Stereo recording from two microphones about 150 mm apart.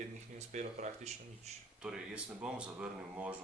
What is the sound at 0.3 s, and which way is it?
Speech, 50° right (ahead or behind).